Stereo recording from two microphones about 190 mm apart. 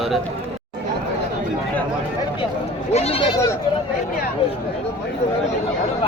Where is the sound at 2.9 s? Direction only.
35° left (ahead or behind).